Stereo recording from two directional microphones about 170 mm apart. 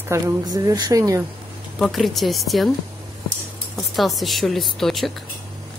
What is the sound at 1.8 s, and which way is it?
Speech, centre (ahead or behind).